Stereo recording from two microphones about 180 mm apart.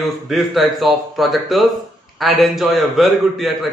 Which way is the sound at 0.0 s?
Centre (ahead or behind).